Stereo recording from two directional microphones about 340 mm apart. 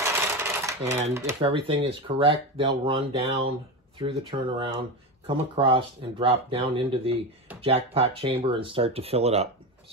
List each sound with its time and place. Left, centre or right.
0.0 s typewriter: centre
1.1 s speech: centre